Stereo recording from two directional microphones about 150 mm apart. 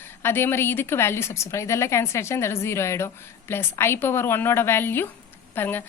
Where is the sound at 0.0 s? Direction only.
15° left (ahead or behind).